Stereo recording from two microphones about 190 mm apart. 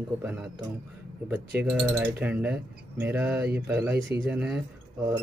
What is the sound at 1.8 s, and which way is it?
Speech, 10° right (ahead or behind).